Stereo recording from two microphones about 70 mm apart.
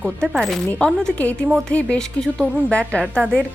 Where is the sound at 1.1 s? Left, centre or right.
Centre.